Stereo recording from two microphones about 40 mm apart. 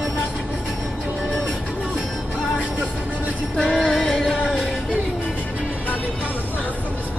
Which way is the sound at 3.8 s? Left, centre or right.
Centre.